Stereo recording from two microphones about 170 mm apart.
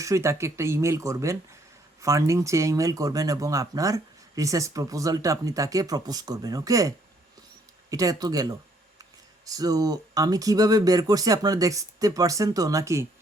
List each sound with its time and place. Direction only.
0.0 s speech: 15° right (ahead or behind)